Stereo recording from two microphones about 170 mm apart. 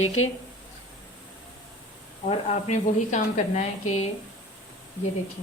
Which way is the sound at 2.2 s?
45° left (ahead or behind).